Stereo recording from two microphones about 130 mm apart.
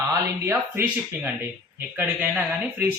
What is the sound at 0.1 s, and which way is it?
Speech, 15° right (ahead or behind).